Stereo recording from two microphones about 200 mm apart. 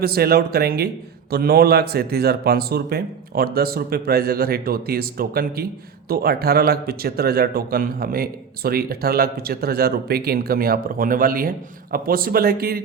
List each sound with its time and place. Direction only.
0.0 s speech: 50° right (ahead or behind)